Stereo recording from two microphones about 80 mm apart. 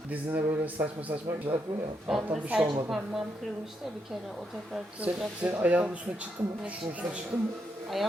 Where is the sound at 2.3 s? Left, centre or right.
Centre.